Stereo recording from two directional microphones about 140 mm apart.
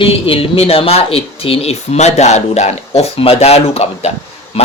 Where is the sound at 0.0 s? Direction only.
40° left (ahead or behind).